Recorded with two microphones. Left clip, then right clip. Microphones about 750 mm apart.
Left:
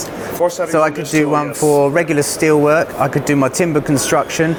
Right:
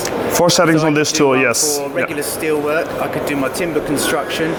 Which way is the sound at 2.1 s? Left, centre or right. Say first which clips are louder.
Left 5 dB; left.